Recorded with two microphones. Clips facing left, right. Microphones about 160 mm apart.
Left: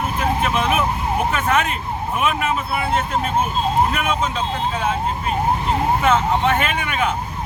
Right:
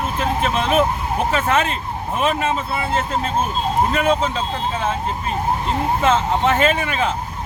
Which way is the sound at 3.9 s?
30° right (ahead or behind).